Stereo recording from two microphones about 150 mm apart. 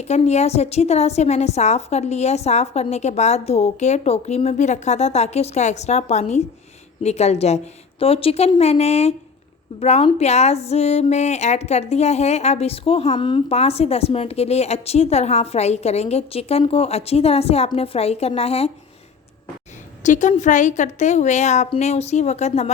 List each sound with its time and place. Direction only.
0.0 s speech: 45° left (ahead or behind)
20.0 s speech: 55° left (ahead or behind)